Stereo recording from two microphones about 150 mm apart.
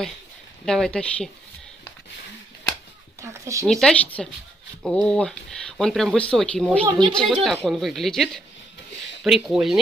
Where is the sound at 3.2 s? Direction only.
20° right (ahead or behind).